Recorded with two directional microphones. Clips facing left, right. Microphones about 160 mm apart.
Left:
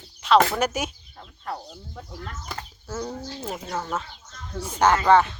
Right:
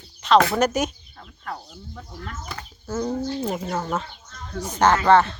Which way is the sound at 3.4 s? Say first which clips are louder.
Right 5 dB; centre (ahead or behind).